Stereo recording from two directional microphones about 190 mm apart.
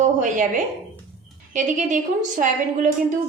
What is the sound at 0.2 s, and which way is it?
A woman's voice, 40° right (ahead or behind).